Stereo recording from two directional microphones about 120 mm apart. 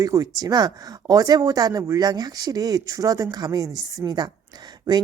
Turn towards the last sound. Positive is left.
turn(degrees=-35)  # may be behind; listen again after turning